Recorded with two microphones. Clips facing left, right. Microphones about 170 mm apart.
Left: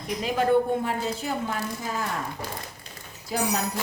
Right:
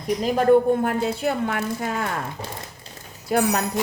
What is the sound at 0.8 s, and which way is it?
A woman's voice, 60° right (ahead or behind).